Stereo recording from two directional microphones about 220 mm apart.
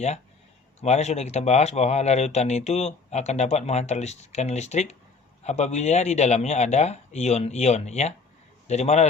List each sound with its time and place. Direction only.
0.8 s a man's voice: 30° left (ahead or behind)